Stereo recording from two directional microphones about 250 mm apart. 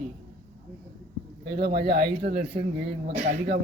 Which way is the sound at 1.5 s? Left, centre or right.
Right.